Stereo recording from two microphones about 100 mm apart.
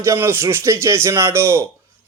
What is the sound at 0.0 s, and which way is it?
A man's voice, 25° right (ahead or behind).